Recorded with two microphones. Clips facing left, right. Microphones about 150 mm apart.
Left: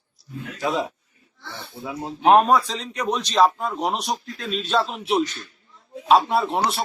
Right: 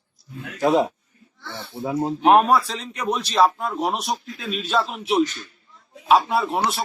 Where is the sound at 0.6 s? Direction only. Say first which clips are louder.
Right 6 dB; 45° right (ahead or behind).